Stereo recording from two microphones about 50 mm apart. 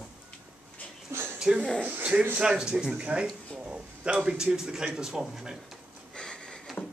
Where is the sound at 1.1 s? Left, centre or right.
Right.